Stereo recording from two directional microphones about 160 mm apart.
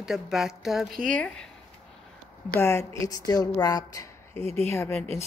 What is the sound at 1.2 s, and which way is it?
Speech, 5° left (ahead or behind).